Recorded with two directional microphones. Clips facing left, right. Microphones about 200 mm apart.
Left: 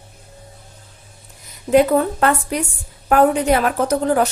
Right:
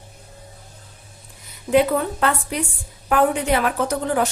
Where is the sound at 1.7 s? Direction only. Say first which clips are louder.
Left 4 dB; 45° left (ahead or behind).